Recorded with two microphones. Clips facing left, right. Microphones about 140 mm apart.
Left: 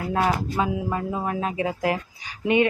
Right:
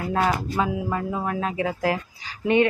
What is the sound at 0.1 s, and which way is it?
Speech, 20° left (ahead or behind).